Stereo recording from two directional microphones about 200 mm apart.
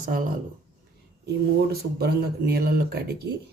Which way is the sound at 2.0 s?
50° right (ahead or behind).